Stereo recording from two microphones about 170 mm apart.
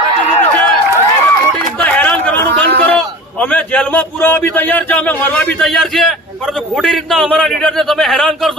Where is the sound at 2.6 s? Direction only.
65° right (ahead or behind).